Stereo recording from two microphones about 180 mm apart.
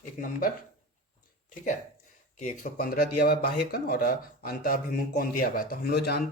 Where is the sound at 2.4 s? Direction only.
45° left (ahead or behind).